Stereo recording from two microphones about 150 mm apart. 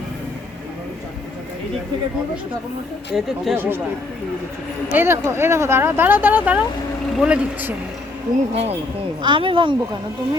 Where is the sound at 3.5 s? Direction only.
15° right (ahead or behind).